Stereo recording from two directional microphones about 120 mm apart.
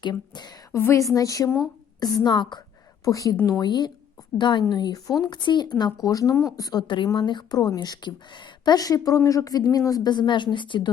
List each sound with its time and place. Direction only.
0.0 s a sound: 35° left (ahead or behind)
0.8 s speech: 20° left (ahead or behind); by 2.6 s 40° left (ahead or behind)
3.0 s speech: 30° left (ahead or behind)